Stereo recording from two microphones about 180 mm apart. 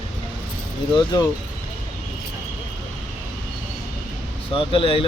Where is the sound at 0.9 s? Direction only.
20° left (ahead or behind).